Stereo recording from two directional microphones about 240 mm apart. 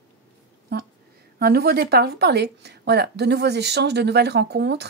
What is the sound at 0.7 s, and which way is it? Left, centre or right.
Speech, right.